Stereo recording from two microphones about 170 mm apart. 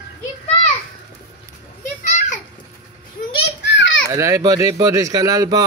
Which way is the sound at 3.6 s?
90° left.